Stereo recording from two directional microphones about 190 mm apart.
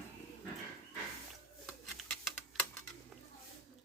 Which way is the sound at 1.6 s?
5° left (ahead or behind).